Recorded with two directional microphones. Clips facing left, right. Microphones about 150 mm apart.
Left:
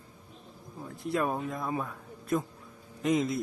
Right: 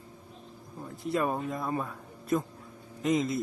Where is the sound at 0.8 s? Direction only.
Centre (ahead or behind).